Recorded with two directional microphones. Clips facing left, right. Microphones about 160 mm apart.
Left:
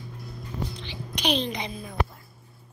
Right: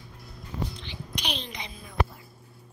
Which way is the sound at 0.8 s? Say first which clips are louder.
Left 7 dB; 90° left.